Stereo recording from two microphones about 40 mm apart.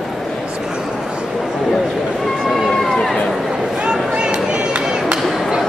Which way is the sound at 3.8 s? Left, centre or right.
Right.